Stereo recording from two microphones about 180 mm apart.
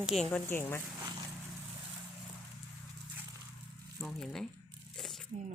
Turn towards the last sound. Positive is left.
turn(degrees=5)  # may be behind; listen again after turning